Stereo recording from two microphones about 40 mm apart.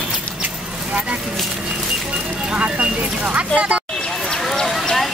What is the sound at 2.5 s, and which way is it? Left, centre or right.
Speech, right.